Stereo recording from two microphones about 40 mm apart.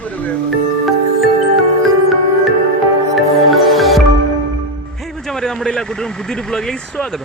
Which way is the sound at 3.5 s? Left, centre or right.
Centre.